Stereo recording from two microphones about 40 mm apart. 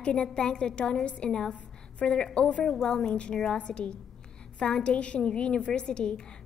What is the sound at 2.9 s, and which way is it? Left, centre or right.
A woman's voice, left.